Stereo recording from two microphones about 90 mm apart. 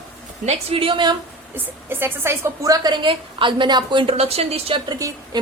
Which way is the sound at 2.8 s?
55° right (ahead or behind).